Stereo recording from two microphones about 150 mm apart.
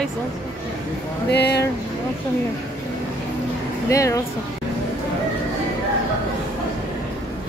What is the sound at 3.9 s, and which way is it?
Speech, 20° left (ahead or behind).